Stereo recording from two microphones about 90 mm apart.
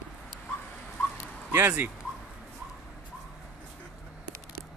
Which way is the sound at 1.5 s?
25° right (ahead or behind).